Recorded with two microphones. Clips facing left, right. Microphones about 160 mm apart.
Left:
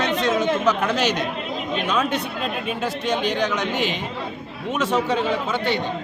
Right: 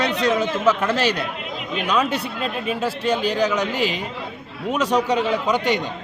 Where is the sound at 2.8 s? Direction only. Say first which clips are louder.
Right 2 dB; 35° right (ahead or behind).